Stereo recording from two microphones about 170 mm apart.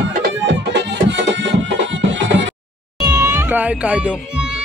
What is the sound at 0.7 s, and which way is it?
Music, 90° right.